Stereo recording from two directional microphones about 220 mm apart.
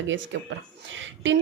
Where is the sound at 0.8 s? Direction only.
60° right (ahead or behind).